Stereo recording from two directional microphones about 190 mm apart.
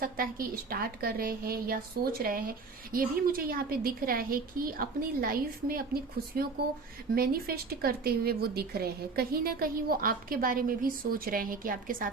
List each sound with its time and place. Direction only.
0.0 s speech: 50° right (ahead or behind)